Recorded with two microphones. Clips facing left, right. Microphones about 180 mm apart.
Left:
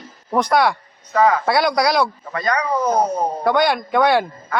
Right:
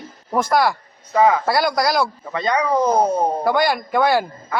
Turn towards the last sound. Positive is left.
turn(degrees=-5)  # may be behind; listen again after turning